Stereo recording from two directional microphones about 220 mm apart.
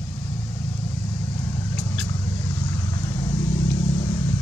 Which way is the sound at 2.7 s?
20° left (ahead or behind).